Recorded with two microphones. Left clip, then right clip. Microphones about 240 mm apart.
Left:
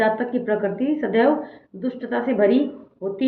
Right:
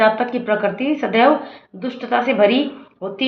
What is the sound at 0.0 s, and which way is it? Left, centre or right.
Speech, right.